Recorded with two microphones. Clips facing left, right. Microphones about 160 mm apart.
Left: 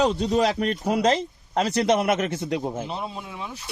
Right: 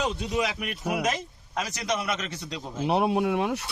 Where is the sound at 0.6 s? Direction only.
35° left (ahead or behind).